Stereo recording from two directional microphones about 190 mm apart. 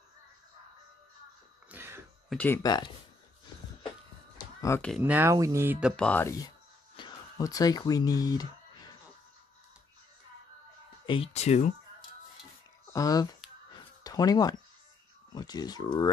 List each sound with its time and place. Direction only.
1.7 s throat clearing: 10° right (ahead or behind)
2.2 s speech: 10° left (ahead or behind)
2.6 s speech: 20° left (ahead or behind)
4.6 s a sound: 15° left (ahead or behind)
5.0 s speech: 10° right (ahead or behind)
6.0 s speech: 10° left (ahead or behind)
7.0 s a sound: 20° left (ahead or behind)
11.1 s speech: 30° left (ahead or behind)
12.9 s speech: 20° left (ahead or behind)